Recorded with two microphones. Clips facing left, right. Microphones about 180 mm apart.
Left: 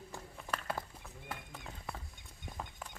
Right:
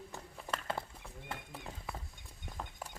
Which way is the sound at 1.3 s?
Centre (ahead or behind).